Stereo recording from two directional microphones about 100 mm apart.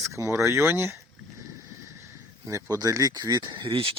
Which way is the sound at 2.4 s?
35° right (ahead or behind).